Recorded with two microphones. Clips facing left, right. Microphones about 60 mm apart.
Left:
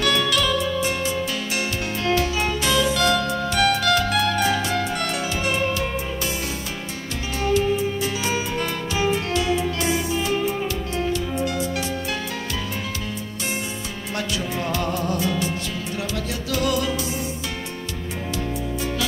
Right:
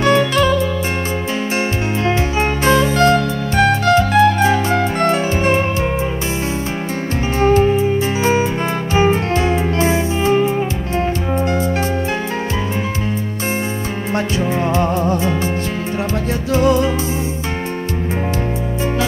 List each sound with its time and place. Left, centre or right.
0.0 s music: right
2.0 s music: right
7.3 s music: right
14.1 s music: right
16.5 s music: right